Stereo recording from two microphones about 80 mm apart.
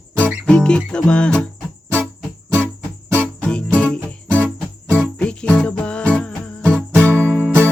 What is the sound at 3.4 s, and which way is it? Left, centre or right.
Music, centre.